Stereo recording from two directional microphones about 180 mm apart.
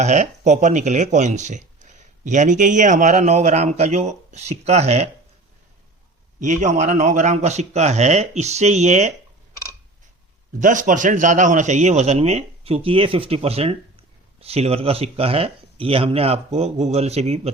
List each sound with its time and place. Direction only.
0.0 s speech: 40° right (ahead or behind)
6.4 s speech: 40° right (ahead or behind)
10.6 s speech: 45° right (ahead or behind)